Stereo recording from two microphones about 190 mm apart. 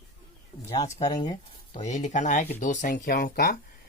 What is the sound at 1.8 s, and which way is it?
Speech, 40° left (ahead or behind).